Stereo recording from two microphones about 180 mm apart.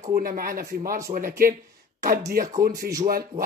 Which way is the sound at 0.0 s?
50° right (ahead or behind).